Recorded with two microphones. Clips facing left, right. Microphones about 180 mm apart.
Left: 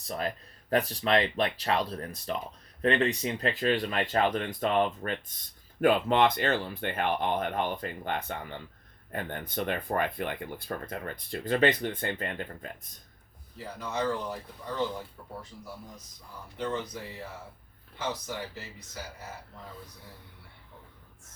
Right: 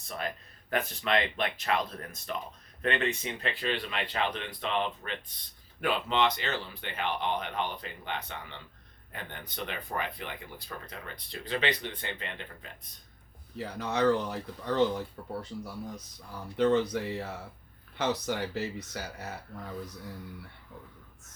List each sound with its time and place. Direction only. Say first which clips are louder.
0.0 s speech: left 4 dB; 35° left (ahead or behind)
13.6 s speech: right 4 dB; 75° right (ahead or behind)
16.6 s speech: right 8 dB; 75° right (ahead or behind)